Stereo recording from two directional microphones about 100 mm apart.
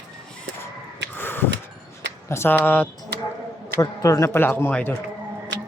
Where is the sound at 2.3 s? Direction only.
25° left (ahead or behind).